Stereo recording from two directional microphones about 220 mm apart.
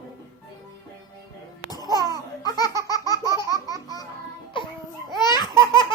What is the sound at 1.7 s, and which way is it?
Laughter, 15° left (ahead or behind).